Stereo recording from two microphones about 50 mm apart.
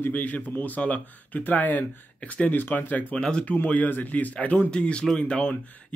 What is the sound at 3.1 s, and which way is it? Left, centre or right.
Speech, centre.